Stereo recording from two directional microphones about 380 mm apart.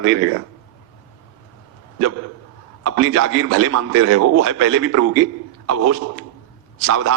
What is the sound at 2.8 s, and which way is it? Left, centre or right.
A man's voice, right.